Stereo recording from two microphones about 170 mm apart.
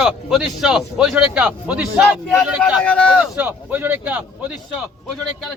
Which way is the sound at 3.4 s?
10° right (ahead or behind).